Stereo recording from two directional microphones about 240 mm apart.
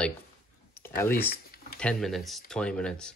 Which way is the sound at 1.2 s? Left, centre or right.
Left.